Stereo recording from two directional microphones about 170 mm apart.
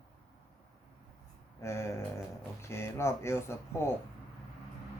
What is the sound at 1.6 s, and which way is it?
Speech, 15° left (ahead or behind).